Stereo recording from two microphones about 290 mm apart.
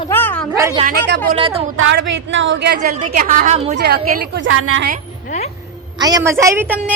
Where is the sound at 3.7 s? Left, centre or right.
Right.